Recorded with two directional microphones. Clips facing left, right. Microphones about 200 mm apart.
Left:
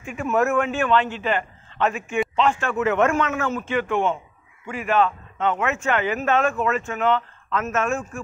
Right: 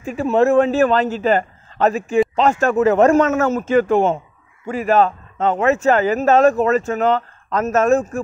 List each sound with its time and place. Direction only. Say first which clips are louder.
0.0 s a man's voice: right 6 dB; 35° right (ahead or behind)